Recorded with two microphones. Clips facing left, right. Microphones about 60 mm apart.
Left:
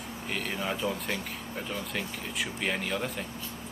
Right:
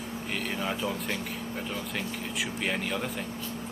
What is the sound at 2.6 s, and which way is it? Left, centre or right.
Speech, centre.